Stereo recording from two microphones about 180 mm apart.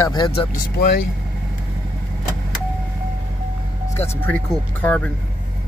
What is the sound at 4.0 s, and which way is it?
Speech, 10° left (ahead or behind).